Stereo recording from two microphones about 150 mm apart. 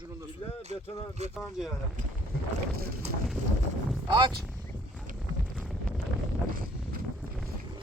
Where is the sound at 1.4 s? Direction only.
5° right (ahead or behind).